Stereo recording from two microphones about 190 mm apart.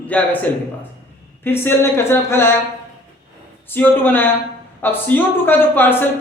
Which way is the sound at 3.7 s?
10° left (ahead or behind).